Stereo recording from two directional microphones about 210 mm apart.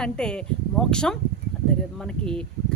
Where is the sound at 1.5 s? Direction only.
5° left (ahead or behind).